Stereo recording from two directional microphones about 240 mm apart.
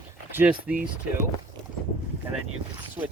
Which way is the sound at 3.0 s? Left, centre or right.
Centre.